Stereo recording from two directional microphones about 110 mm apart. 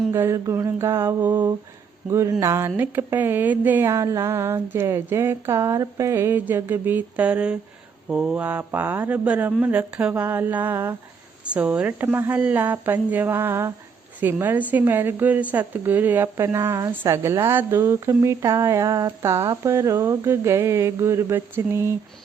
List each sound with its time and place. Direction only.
0.1 s a woman's voice: 25° right (ahead or behind)